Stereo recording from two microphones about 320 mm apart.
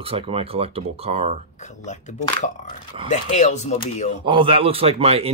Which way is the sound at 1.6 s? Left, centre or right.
Left.